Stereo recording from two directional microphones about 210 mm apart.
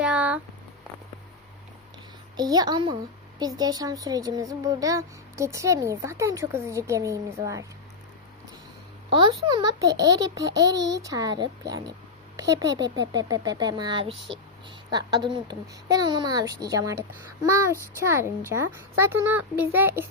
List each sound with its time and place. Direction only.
0.0 s a sound: 5° right (ahead or behind)
2.3 s a child's voice: 20° right (ahead or behind)
9.1 s a child's voice: 20° right (ahead or behind)
10.8 s a child's voice: 55° right (ahead or behind)
11.0 s a child's voice: 15° right (ahead or behind)